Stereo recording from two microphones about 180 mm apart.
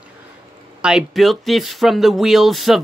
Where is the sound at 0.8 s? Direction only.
5° right (ahead or behind).